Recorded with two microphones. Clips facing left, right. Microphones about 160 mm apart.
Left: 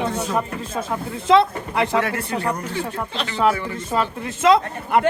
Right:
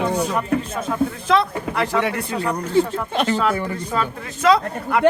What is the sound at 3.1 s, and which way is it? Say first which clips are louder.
Speech: right 8 dB; 50° right (ahead or behind).